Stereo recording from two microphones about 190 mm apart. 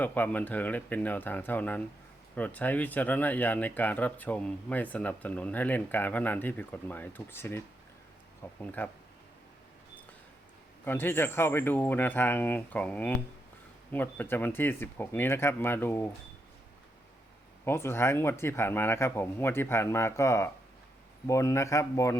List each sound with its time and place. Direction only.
0.0 s speech: 10° left (ahead or behind)
10.8 s speech: 10° left (ahead or behind)
17.7 s speech: 15° left (ahead or behind)